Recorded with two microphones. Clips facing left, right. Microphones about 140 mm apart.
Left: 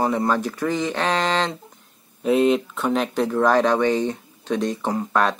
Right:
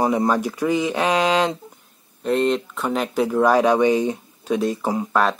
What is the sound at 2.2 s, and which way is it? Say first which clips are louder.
Speech: left 2 dB; 5° left (ahead or behind).